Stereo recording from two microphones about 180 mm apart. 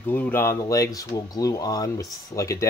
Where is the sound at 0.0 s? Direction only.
10° left (ahead or behind).